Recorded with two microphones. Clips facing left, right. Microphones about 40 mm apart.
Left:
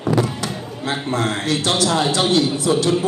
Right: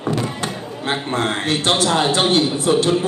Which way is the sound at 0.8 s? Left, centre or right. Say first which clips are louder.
Right 1 dB; right.